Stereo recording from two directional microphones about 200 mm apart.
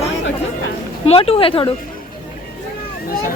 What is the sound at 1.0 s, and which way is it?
Speech, 30° left (ahead or behind).